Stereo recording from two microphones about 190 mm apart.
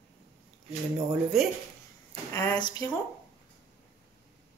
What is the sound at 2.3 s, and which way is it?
Speech, 15° left (ahead or behind).